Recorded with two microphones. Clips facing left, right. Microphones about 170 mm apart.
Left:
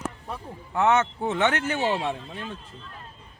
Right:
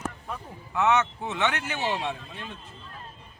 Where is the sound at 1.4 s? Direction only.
45° left (ahead or behind).